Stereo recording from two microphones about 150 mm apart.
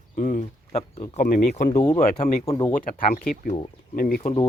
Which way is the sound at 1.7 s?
20° left (ahead or behind).